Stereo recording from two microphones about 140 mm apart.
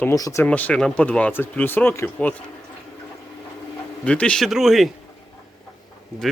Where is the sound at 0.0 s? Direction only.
25° left (ahead or behind).